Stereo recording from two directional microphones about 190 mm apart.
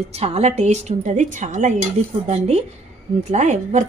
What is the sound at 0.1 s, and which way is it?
A woman's voice, 35° right (ahead or behind).